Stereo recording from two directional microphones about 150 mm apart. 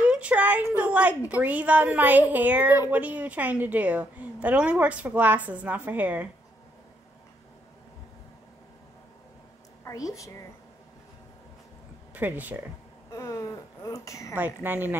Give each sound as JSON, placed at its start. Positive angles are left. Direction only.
{"t": 0.0, "sound": "a sound", "side_deg": -10}
{"t": 1.3, "sound": "a woman's voice", "side_deg": -10}
{"t": 9.8, "sound": "a woman's voice", "side_deg": 20}
{"t": 12.1, "sound": "speech", "side_deg": -10}
{"t": 13.1, "sound": "a woman's voice", "side_deg": 20}
{"t": 14.3, "sound": "a woman's voice", "side_deg": -15}